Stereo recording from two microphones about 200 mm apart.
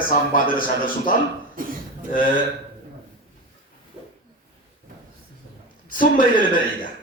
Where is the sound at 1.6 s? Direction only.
45° right (ahead or behind).